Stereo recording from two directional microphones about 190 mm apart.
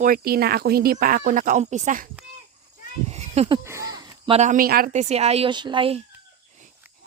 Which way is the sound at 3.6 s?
15° right (ahead or behind).